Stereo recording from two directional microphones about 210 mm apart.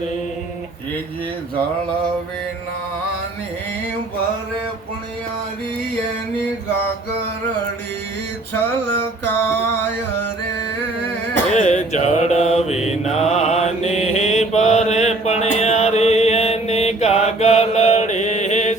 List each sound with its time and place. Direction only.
9.2 s mantra: 10° left (ahead or behind)
11.5 s mantra: 35° left (ahead or behind)